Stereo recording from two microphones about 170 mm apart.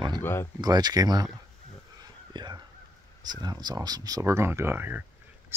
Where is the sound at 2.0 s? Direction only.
25° right (ahead or behind).